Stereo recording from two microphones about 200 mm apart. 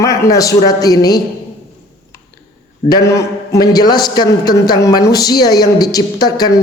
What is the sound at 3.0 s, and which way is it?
A man's voice, 15° left (ahead or behind).